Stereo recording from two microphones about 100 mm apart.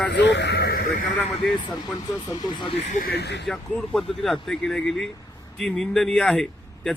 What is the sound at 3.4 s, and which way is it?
Speech, 5° left (ahead or behind).